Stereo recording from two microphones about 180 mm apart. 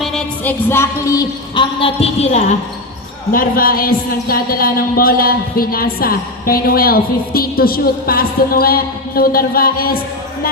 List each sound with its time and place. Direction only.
0.0 s speech: 5° left (ahead or behind); by 2.4 s 35° left (ahead or behind)
3.3 s speech: 50° left (ahead or behind)